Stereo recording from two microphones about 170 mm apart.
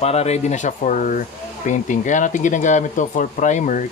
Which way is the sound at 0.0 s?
40° left (ahead or behind).